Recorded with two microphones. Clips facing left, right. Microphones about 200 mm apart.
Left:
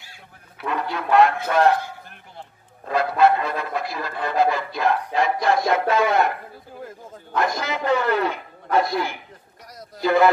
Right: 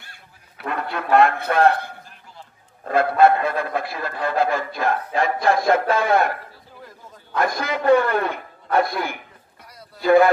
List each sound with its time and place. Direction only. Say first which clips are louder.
0.0 s goose: left 2 dB; 55° right (ahead or behind)
1.1 s a man's voice: even; 55° right (ahead or behind)
7.3 s speech: right 1 dB; 55° right (ahead or behind)